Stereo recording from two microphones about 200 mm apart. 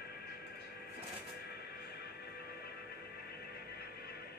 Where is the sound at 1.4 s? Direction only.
55° left (ahead or behind).